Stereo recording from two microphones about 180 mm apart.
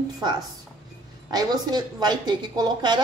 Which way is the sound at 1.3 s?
20° right (ahead or behind).